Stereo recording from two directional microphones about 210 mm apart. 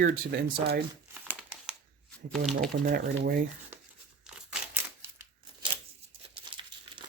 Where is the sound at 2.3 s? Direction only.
Centre (ahead or behind).